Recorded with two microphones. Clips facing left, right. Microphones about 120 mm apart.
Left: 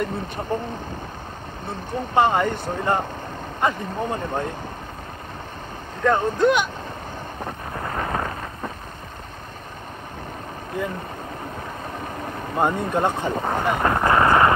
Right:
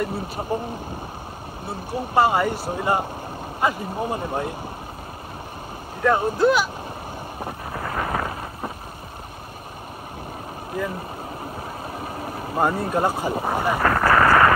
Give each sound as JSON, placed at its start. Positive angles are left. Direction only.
{"t": 1.7, "sound": "speech", "side_deg": -10}
{"t": 6.0, "sound": "speech", "side_deg": -10}
{"t": 7.9, "sound": "wind noise", "side_deg": -15}
{"t": 12.5, "sound": "speech", "side_deg": -5}
{"t": 13.7, "sound": "speech", "side_deg": 20}